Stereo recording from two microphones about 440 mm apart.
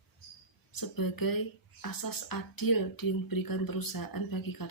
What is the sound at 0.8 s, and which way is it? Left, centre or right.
Speech, left.